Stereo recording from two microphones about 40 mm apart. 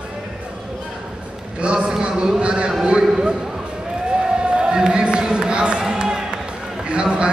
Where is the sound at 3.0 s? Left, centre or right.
Centre.